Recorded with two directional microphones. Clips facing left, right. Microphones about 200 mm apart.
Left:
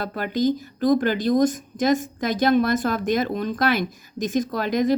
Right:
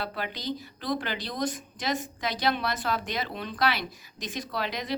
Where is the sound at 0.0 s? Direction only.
45° left (ahead or behind).